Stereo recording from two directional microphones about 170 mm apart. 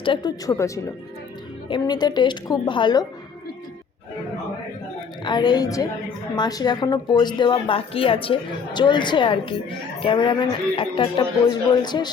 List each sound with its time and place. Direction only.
0.0 s a woman's voice: 25° left (ahead or behind)
5.2 s a woman's voice: 25° left (ahead or behind)